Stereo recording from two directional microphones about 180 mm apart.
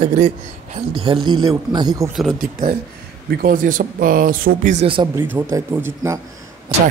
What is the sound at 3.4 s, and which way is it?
Speech, 50° right (ahead or behind).